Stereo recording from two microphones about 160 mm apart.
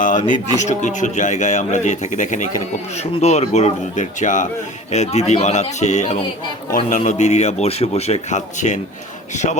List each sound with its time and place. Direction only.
0.0 s speech: 50° left (ahead or behind)
6.7 s speech: 60° left (ahead or behind)